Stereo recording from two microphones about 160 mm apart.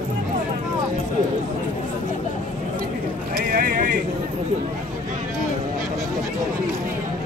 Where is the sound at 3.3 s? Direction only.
60° right (ahead or behind).